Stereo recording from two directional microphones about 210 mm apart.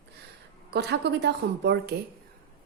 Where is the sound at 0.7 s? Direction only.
50° right (ahead or behind).